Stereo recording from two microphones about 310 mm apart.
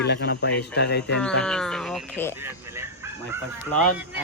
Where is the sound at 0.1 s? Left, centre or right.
Left.